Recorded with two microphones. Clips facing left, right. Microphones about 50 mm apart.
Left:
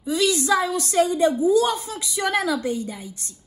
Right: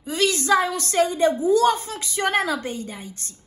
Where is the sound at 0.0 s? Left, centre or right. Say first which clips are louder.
Left 1 dB; right.